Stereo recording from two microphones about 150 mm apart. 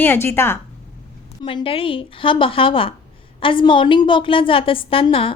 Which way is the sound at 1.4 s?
35° left (ahead or behind).